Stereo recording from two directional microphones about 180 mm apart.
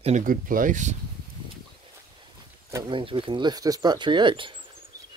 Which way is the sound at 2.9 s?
30° right (ahead or behind).